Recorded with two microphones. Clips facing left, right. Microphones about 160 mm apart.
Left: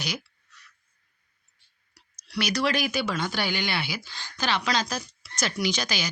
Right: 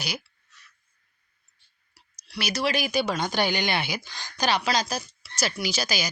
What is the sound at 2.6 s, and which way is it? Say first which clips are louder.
A woman's voice: right 5 dB; 10° right (ahead or behind).